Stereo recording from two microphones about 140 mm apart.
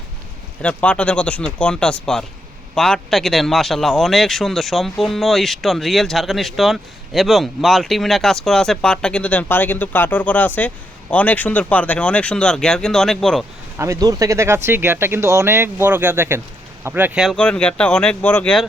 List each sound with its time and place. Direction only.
0.6 s speech: 10° left (ahead or behind)
13.7 s speech: 20° right (ahead or behind)
17.2 s speech: 5° left (ahead or behind)